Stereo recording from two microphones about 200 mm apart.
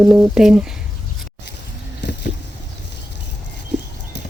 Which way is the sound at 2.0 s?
60° left (ahead or behind).